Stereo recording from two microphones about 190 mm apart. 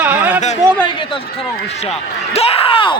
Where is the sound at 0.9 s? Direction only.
25° left (ahead or behind).